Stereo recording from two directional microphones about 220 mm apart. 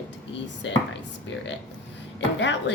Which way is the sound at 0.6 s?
60° left (ahead or behind).